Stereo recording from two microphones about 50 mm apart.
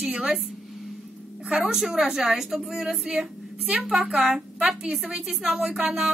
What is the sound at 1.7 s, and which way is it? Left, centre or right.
A woman's voice, centre.